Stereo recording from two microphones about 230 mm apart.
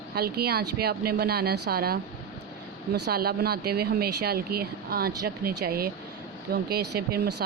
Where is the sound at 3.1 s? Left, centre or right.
Right.